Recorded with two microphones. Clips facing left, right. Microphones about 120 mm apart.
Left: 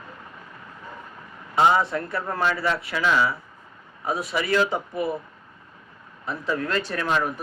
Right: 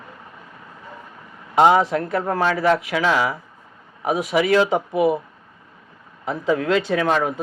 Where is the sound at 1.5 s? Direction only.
55° right (ahead or behind).